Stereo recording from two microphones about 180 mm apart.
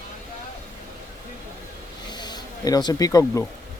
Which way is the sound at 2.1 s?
25° left (ahead or behind).